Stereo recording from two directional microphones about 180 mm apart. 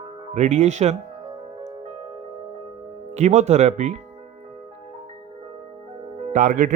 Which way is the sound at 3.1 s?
40° right (ahead or behind).